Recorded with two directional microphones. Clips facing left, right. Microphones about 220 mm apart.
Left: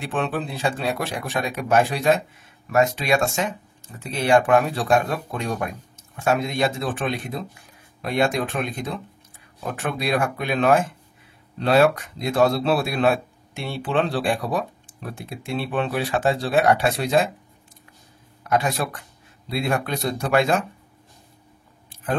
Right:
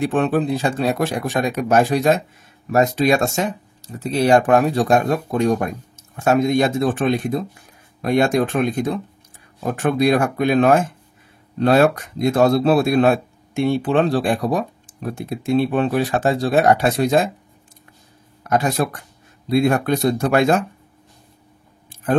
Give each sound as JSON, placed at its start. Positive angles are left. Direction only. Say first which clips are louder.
{"t": 0.0, "sound": "speech", "louder": "right 8 dB", "side_deg": -45}
{"t": 18.4, "sound": "speech", "louder": "right 4 dB", "side_deg": -45}